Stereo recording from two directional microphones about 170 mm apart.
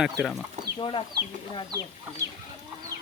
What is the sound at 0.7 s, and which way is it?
Speech, 30° left (ahead or behind).